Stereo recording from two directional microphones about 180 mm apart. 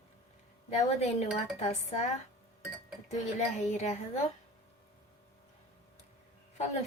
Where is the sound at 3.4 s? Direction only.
40° left (ahead or behind).